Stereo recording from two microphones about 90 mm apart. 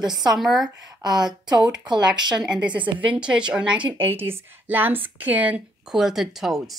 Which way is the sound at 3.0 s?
15° right (ahead or behind).